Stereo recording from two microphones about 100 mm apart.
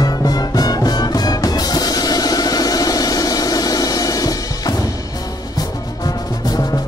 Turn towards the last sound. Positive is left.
turn(degrees=40)  # may be behind; listen again after turning